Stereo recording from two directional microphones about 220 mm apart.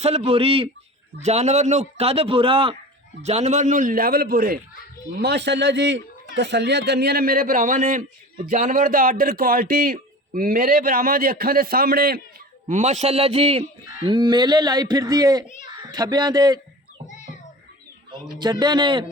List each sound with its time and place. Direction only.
0.0 s a man's voice: 30° right (ahead or behind); by 12.2 s 45° right (ahead or behind)
12.6 s a man's voice: 30° right (ahead or behind)
18.6 s a man's voice: 20° right (ahead or behind)